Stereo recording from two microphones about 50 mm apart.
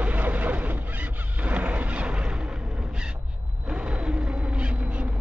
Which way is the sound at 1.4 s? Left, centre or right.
Right.